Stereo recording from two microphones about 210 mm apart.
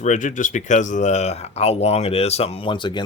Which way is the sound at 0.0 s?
35° left (ahead or behind).